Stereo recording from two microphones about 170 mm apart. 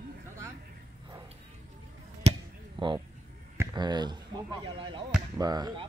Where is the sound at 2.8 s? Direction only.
30° right (ahead or behind).